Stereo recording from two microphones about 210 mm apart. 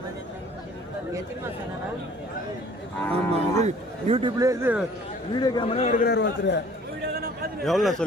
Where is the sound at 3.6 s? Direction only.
30° right (ahead or behind); by 4.9 s 10° right (ahead or behind).